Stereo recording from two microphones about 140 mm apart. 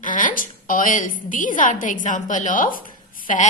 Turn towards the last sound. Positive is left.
turn(degrees=75)  # may be behind; listen again after turning